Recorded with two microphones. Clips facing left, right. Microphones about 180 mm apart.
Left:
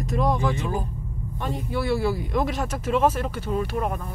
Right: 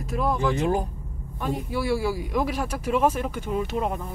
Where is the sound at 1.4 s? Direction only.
10° right (ahead or behind).